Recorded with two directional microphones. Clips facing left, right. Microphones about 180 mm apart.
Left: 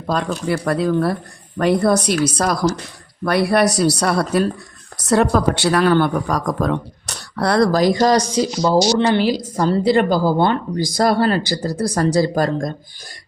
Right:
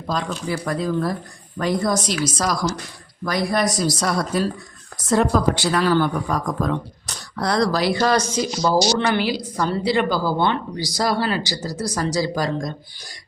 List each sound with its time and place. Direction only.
0.1 s speech: 65° left (ahead or behind); by 8.4 s 35° left (ahead or behind)
9.1 s speech: 45° left (ahead or behind)